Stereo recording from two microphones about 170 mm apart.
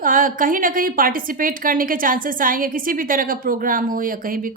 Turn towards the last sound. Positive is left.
turn(degrees=-55)  # may be behind; listen again after turning